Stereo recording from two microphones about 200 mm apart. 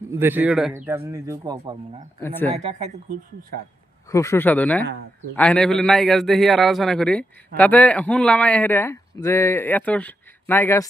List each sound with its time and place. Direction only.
0.1 s a man's voice: 10° right (ahead or behind)
2.5 s speech: 30° right (ahead or behind)
4.1 s a man's voice: 15° left (ahead or behind)